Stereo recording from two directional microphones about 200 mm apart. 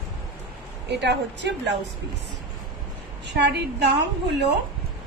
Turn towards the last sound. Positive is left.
turn(degrees=-55)  # may be behind; listen again after turning